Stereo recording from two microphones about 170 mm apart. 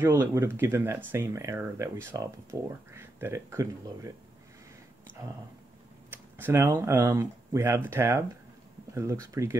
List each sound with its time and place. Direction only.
0.0 s speech: 15° right (ahead or behind)
5.1 s speech: 15° right (ahead or behind)